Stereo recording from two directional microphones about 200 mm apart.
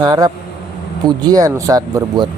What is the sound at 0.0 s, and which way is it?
Speech, 20° right (ahead or behind).